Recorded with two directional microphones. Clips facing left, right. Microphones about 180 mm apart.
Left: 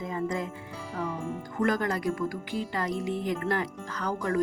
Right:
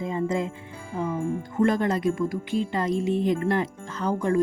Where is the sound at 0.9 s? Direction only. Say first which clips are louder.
Right 6 dB; 25° right (ahead or behind).